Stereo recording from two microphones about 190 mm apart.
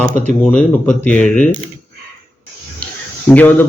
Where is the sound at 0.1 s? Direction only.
45° left (ahead or behind).